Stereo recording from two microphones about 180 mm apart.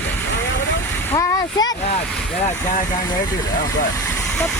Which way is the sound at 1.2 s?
20° left (ahead or behind).